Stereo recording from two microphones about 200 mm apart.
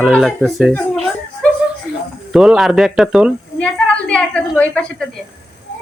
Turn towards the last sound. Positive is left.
turn(degrees=5)  # may be behind; listen again after turning